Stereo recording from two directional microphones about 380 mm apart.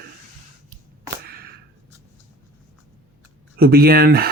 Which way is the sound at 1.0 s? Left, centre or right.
Right.